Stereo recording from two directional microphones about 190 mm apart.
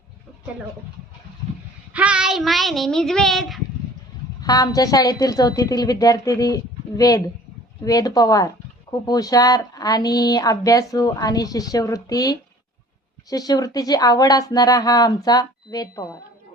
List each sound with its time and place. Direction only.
1.9 s speech: 5° right (ahead or behind)
4.4 s speech: 20° left (ahead or behind)